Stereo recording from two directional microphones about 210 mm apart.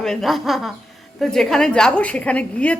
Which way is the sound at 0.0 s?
Centre (ahead or behind).